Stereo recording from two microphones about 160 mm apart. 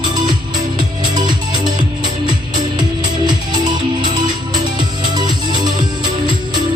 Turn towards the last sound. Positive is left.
turn(degrees=-25)  # may be behind; listen again after turning